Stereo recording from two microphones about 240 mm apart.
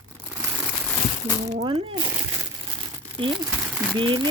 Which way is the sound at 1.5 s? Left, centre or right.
Right.